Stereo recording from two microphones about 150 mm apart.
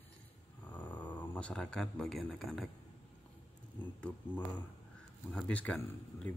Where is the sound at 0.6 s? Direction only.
10° left (ahead or behind).